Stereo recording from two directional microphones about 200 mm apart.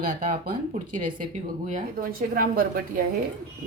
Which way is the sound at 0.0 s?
45° right (ahead or behind).